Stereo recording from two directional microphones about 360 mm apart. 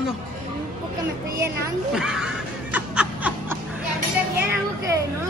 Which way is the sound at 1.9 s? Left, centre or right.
Centre.